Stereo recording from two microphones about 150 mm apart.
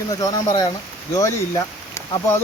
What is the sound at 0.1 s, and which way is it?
Speech, 25° left (ahead or behind).